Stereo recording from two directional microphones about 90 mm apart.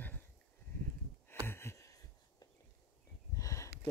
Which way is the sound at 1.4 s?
30° left (ahead or behind).